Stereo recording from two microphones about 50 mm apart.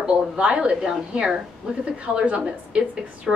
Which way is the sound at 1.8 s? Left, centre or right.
Right.